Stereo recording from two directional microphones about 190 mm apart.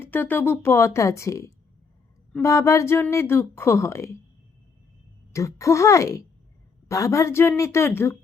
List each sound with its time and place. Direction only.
0.0 s speech: 10° left (ahead or behind)
5.3 s speech: 15° left (ahead or behind)